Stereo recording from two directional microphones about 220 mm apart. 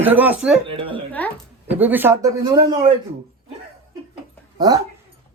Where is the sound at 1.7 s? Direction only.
10° right (ahead or behind).